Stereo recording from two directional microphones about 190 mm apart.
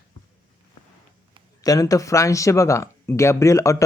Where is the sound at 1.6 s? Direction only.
20° left (ahead or behind).